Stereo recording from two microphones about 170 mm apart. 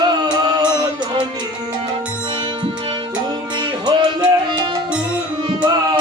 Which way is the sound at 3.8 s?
25° right (ahead or behind).